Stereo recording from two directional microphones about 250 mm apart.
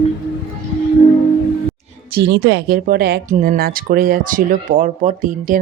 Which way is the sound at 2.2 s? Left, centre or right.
Right.